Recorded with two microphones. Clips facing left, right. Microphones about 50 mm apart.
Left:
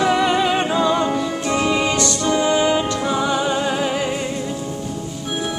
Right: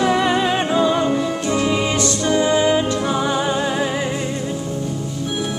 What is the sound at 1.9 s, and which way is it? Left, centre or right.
Music, right.